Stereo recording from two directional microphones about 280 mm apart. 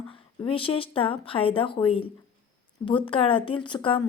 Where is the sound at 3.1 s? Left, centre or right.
Centre.